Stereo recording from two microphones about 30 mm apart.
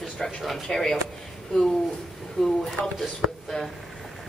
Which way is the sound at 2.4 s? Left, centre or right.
Centre.